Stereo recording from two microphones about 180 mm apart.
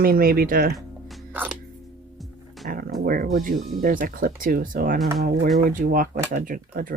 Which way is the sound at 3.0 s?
55° right (ahead or behind).